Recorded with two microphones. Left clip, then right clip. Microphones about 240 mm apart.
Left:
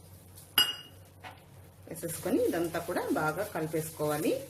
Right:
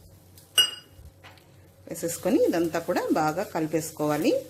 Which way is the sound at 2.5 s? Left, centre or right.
Right.